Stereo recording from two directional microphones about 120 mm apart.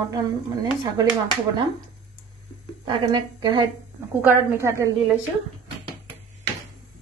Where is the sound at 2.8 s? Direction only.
45° right (ahead or behind).